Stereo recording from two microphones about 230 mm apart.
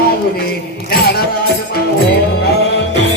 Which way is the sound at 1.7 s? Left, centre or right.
Left.